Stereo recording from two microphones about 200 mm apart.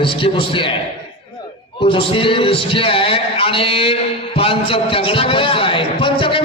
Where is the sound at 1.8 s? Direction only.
25° left (ahead or behind).